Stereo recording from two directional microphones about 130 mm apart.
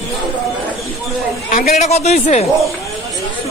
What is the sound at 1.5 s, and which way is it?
Speech, 60° left (ahead or behind).